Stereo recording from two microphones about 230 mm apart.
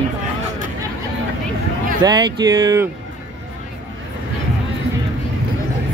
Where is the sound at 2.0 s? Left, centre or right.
Centre.